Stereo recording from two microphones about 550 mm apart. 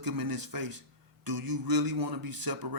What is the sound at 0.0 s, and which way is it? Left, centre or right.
A man's voice, right.